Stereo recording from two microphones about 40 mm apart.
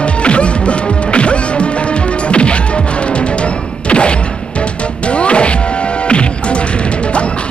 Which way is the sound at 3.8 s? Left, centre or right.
Left.